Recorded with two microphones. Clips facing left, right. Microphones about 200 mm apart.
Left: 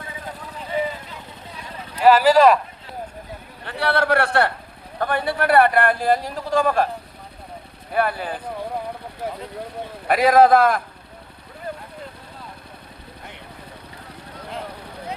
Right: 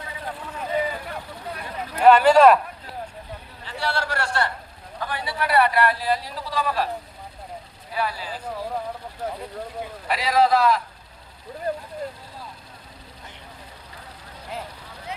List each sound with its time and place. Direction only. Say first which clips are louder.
1.0 s vehicle: right 5 dB; 60° right (ahead or behind)
2.0 s speech: even; 5° left (ahead or behind)
3.6 s a man's voice: left 6 dB; 60° left (ahead or behind)
7.9 s speech: left 6 dB; 55° left (ahead or behind)
10.1 s a man's voice: left 6 dB; 50° left (ahead or behind)